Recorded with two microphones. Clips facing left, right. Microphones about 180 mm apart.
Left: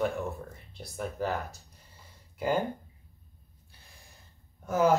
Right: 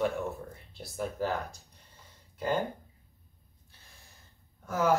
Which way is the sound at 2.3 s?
10° left (ahead or behind).